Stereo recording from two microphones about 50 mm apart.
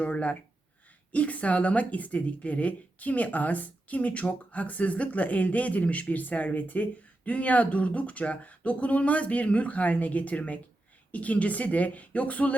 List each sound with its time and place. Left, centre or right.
0.0 s speech: left